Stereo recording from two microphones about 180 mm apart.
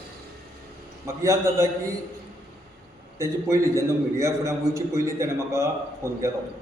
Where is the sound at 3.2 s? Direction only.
15° right (ahead or behind).